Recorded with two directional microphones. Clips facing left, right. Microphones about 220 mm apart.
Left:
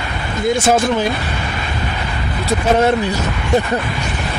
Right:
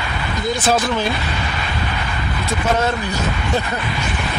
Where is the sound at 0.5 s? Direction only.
25° left (ahead or behind).